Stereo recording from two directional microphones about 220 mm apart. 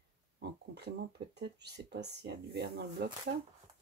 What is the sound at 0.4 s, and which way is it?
Speech, 50° right (ahead or behind).